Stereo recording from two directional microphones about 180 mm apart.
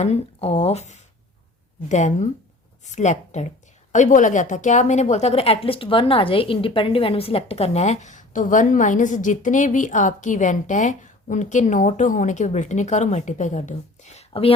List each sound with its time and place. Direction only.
0.0 s a woman's voice: 35° left (ahead or behind)